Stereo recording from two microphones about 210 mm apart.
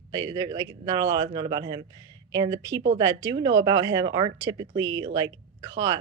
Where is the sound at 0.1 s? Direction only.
15° right (ahead or behind).